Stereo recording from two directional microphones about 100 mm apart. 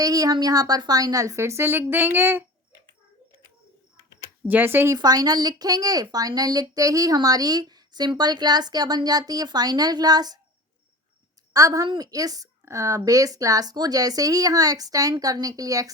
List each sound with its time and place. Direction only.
0.0 s a woman's voice: 40° right (ahead or behind); by 2.4 s 20° right (ahead or behind)
4.4 s speech: 20° right (ahead or behind)
4.9 s a woman's voice: 40° right (ahead or behind)
11.5 s a woman's voice: 35° right (ahead or behind)